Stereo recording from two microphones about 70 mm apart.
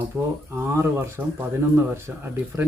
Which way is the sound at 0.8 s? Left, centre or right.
Right.